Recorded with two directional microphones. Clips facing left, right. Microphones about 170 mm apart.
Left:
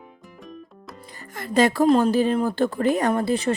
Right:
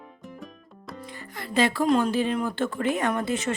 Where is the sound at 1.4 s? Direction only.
45° left (ahead or behind).